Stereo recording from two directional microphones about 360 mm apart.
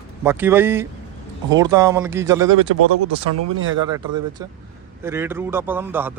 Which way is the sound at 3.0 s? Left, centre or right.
Right.